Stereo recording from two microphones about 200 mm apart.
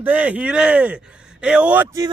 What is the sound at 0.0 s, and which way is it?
Speech, 10° right (ahead or behind).